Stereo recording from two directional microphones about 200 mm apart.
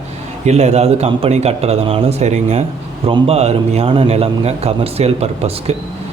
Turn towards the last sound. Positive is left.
turn(degrees=-30)  # may be behind; listen again after turning